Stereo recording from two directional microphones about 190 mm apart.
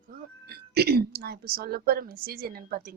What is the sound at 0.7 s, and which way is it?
A woman's voice, 55° right (ahead or behind).